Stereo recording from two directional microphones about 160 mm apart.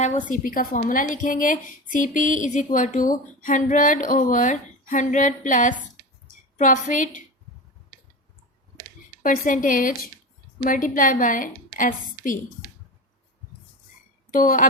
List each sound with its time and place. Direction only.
0.3 s a woman's voice: 60° left (ahead or behind)
9.2 s a woman's voice: 55° left (ahead or behind)
14.3 s speech: 60° left (ahead or behind)